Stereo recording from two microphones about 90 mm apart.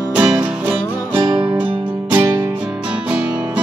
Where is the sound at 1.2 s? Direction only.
65° right (ahead or behind).